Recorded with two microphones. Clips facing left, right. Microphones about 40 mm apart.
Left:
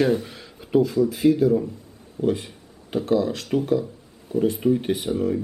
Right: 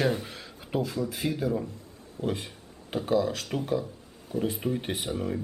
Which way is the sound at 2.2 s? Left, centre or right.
Left.